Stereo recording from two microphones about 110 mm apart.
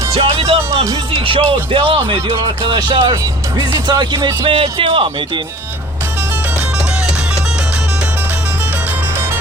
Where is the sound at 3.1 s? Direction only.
30° right (ahead or behind).